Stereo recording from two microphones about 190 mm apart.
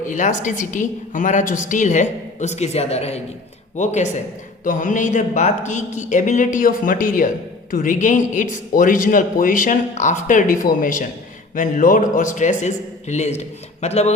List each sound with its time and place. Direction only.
0.0 s a woman's voice: 40° left (ahead or behind)